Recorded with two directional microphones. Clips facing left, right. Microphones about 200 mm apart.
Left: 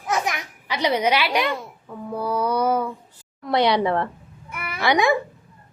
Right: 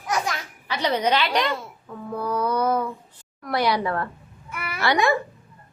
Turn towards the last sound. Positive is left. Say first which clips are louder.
# left 2 dB
turn(degrees=15)  # may be behind; listen again after turning